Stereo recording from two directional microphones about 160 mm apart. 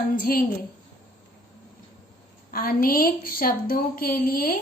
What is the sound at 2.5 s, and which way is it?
A woman's voice, 65° left (ahead or behind).